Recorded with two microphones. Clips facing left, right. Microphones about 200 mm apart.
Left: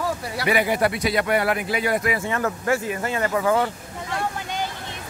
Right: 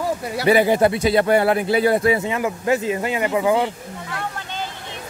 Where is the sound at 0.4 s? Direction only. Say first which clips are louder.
Right 6 dB; 30° right (ahead or behind).